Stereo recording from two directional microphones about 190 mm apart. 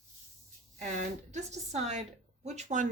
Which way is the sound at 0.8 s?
35° right (ahead or behind).